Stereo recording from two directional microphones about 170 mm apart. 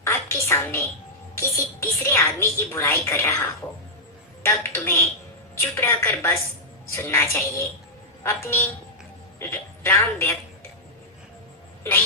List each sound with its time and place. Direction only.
0.0 s a sound: 15° left (ahead or behind)
1.4 s a woman's voice: 15° left (ahead or behind)
4.4 s a woman's voice: 15° left (ahead or behind)
11.8 s speech: 15° left (ahead or behind)